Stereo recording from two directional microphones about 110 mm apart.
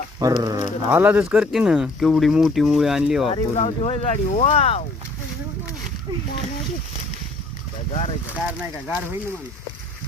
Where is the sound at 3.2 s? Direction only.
65° left (ahead or behind).